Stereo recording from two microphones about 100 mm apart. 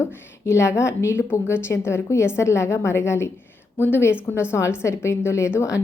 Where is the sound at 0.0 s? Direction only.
30° left (ahead or behind).